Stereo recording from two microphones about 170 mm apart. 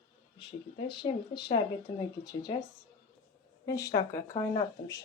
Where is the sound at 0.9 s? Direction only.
30° left (ahead or behind).